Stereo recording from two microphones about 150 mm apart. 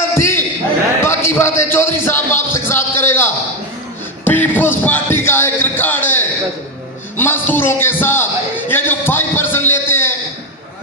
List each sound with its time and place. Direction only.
0.1 s basketball bounce: 15° left (ahead or behind)
1.0 s speech: 15° left (ahead or behind)
4.3 s a sound: 15° left (ahead or behind)
7.2 s a man's voice: 15° left (ahead or behind)